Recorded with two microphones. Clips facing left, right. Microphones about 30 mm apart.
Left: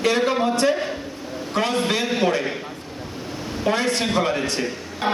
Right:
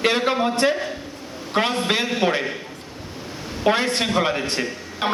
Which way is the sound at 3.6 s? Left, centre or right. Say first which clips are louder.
Right 2 dB; right.